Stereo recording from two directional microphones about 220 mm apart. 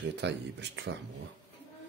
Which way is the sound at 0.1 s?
50° right (ahead or behind).